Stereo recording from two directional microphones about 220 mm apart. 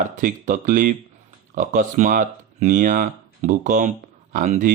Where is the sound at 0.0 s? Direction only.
35° right (ahead or behind).